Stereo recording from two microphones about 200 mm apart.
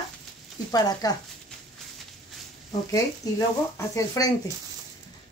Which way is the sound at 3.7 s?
15° left (ahead or behind).